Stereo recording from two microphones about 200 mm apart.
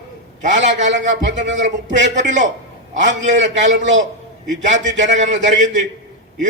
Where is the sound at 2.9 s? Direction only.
65° right (ahead or behind).